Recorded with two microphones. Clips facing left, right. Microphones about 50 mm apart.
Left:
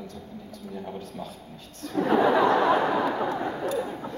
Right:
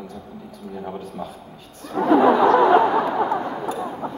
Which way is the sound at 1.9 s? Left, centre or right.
Right.